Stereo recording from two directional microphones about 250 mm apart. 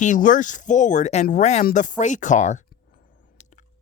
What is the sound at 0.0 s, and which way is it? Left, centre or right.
Speech, left.